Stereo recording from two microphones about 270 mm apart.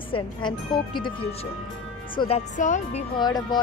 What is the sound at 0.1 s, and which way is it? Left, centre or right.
A woman's voice, centre.